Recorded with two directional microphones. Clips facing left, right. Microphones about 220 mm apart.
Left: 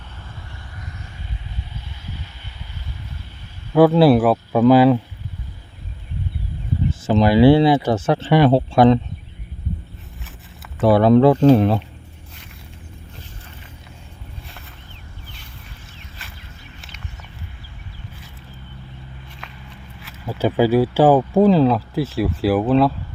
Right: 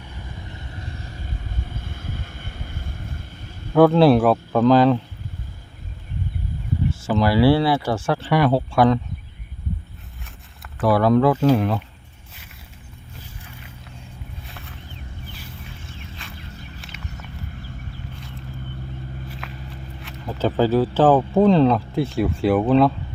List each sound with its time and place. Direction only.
1.5 s vehicle: 50° right (ahead or behind)
3.7 s speech: 5° left (ahead or behind)
7.0 s speech: 20° left (ahead or behind)
10.8 s speech: 25° left (ahead or behind)
16.2 s a sound: 5° left (ahead or behind)
19.4 s walk: 5° right (ahead or behind)
20.1 s speech: 5° left (ahead or behind)